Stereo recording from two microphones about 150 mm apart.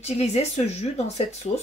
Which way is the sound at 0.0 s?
45° left (ahead or behind).